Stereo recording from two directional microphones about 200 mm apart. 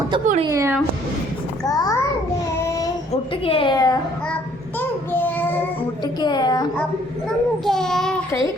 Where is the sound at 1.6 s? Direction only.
20° left (ahead or behind).